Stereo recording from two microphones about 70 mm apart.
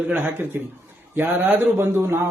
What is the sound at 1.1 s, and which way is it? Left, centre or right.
Speech, right.